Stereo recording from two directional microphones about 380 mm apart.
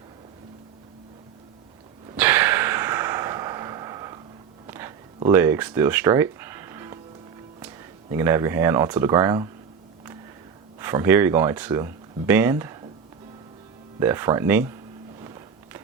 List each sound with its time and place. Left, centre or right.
2.0 s a sound: centre
8.1 s speech: centre
10.8 s speech: centre
14.0 s speech: centre
15.2 s music: centre